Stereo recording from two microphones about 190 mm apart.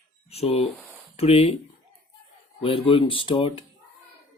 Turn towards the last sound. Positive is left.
turn(degrees=25)  # may be behind; listen again after turning